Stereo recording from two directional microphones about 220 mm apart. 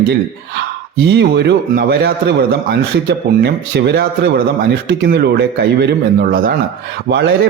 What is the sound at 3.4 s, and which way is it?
A man's voice, 45° right (ahead or behind).